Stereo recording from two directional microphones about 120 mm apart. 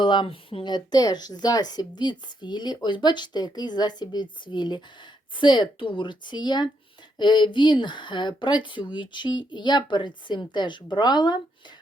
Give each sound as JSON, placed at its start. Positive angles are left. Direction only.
{"t": 0.0, "sound": "speech", "side_deg": 40}